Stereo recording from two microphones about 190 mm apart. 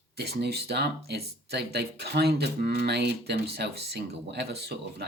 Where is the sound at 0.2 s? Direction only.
55° right (ahead or behind).